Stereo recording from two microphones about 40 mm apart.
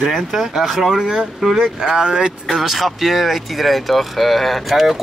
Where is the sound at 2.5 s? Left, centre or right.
Centre.